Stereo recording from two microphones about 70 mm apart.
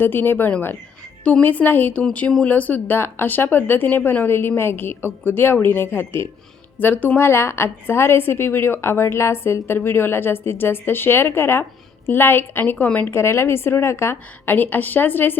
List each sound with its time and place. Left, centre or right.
0.0 s a woman's voice: left
7.3 s a woman's voice: left
13.1 s a woman's voice: left